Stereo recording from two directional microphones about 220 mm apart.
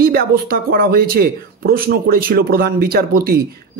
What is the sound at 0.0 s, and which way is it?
Speech, 45° right (ahead or behind).